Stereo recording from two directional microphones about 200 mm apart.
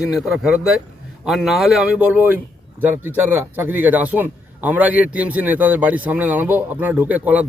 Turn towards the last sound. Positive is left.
turn(degrees=-10)  # may be behind; listen again after turning